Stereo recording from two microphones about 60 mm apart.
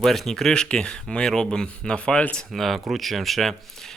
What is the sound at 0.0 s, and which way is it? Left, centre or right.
Speech, centre.